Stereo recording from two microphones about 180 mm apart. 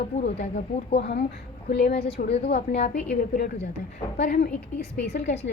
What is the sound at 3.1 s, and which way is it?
A woman's voice, 55° left (ahead or behind).